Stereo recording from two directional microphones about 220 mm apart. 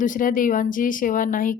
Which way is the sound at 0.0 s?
35° left (ahead or behind).